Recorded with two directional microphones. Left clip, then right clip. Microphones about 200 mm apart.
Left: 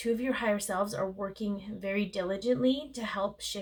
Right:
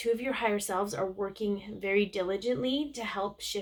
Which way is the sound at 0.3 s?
35° right (ahead or behind).